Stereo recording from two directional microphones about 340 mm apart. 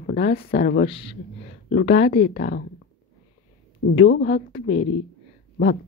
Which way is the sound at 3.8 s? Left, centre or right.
Left.